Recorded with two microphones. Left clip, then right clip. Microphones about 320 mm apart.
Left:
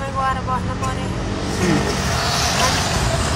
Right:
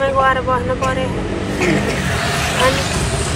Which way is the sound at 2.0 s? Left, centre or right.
Centre.